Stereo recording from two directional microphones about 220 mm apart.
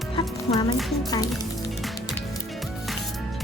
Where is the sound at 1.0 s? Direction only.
15° left (ahead or behind).